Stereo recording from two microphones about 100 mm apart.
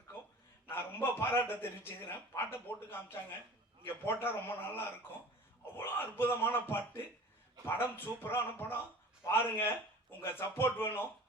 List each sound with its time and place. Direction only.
0.7 s a man's voice: 20° left (ahead or behind)